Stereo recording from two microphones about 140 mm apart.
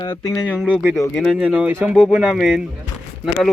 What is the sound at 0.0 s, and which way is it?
Speech, 30° left (ahead or behind).